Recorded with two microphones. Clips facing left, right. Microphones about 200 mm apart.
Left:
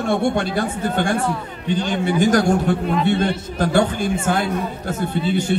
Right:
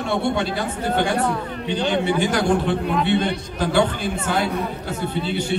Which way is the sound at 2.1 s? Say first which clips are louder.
Left 3 dB; 45° left (ahead or behind).